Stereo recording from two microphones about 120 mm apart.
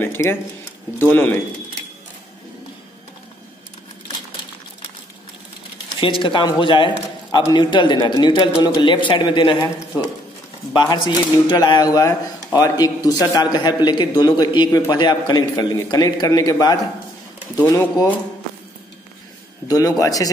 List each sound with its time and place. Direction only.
0.0 s a man's voice: 20° left (ahead or behind)
5.9 s a man's voice: 45° left (ahead or behind)
10.7 s a man's voice: 40° left (ahead or behind)
19.7 s a man's voice: 30° left (ahead or behind)